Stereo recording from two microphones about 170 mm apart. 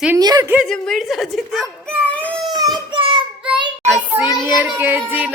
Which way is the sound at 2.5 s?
25° right (ahead or behind).